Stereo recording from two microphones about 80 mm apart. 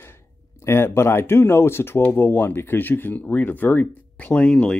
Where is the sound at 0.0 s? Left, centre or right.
Left.